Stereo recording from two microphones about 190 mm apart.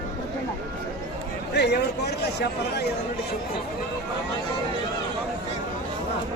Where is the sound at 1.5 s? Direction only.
60° left (ahead or behind).